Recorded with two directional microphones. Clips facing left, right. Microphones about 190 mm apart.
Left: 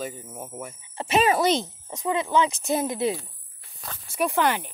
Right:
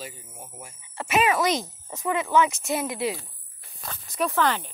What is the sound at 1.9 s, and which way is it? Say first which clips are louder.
A child's voice: even; 20° left (ahead or behind).